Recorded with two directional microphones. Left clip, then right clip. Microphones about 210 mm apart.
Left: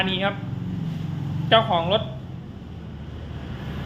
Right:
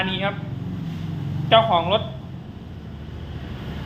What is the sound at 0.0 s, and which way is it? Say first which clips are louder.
Speech: left 1 dB; 10° left (ahead or behind).